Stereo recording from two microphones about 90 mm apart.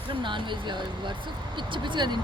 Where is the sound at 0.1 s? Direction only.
65° right (ahead or behind).